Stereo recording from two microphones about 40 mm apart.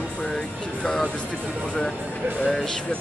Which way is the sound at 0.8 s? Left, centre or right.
Centre.